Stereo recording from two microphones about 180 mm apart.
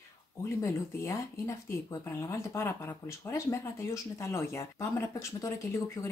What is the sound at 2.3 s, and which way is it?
Speech, 15° left (ahead or behind).